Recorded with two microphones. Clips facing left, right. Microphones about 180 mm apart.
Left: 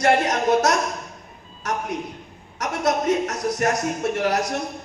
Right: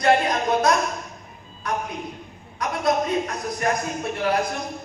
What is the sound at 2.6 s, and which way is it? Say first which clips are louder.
A woman's voice: even; 80° left.